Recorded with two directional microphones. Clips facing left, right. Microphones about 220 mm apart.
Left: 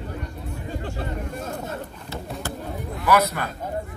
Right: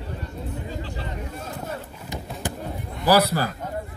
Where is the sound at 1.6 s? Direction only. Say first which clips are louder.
Left 1 dB; 15° right (ahead or behind).